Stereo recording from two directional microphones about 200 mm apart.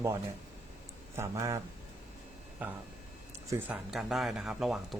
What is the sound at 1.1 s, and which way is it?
Speech, 15° right (ahead or behind).